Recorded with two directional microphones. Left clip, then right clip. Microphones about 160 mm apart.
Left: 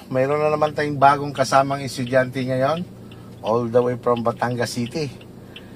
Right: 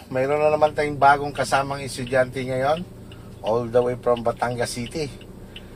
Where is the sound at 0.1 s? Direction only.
20° left (ahead or behind).